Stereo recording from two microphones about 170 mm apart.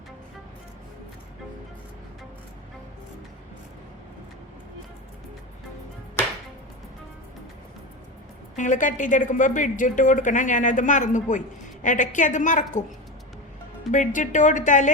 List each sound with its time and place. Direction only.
8.5 s a woman's voice: 45° left (ahead or behind)
13.9 s a woman's voice: 50° left (ahead or behind)